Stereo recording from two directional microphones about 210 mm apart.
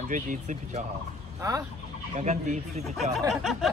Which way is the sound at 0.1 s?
35° right (ahead or behind).